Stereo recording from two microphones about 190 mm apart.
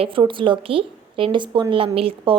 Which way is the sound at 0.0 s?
25° right (ahead or behind).